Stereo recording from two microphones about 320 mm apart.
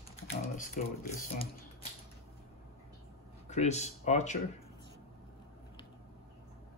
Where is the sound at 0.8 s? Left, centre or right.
Left.